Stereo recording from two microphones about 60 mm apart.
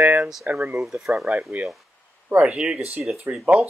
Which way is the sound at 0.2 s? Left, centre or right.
Centre.